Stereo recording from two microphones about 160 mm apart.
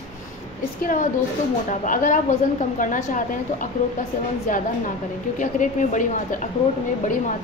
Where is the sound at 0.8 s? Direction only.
55° left (ahead or behind).